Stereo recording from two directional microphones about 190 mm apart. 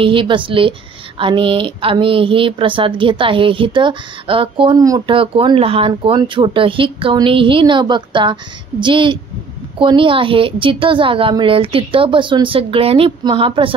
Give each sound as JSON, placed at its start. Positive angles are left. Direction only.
{"t": 0.0, "sound": "a woman's voice", "side_deg": -25}